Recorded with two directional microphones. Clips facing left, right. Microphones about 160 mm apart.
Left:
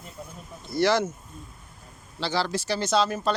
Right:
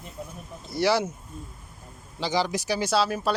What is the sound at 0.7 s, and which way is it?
Speech, 10° right (ahead or behind).